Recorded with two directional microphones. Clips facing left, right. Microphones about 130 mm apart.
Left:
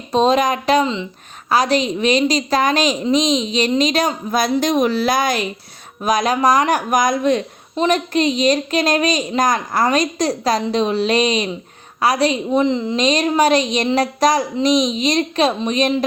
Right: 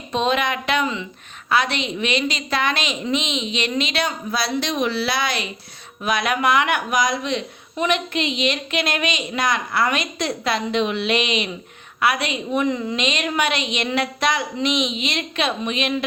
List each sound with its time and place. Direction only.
0.1 s a woman's voice: 35° left (ahead or behind)
13.0 s a woman's voice: 35° left (ahead or behind)